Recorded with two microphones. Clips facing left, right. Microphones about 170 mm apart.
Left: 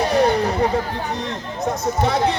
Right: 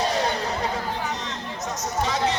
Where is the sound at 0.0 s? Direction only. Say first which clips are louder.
Left 7 dB; 60° left (ahead or behind).